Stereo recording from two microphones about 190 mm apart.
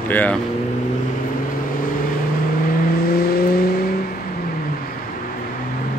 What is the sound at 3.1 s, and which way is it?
Vehicle, 55° left (ahead or behind).